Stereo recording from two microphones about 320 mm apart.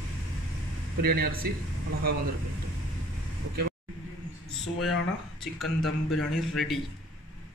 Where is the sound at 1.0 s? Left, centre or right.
Right.